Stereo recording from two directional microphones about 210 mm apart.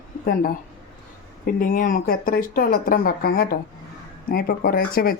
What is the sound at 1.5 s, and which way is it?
Speech, 40° left (ahead or behind).